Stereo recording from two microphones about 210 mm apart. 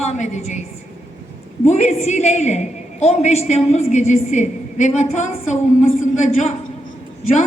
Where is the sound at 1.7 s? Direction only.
30° left (ahead or behind).